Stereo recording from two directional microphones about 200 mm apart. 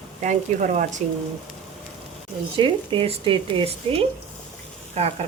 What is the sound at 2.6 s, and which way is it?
Speech, 25° right (ahead or behind).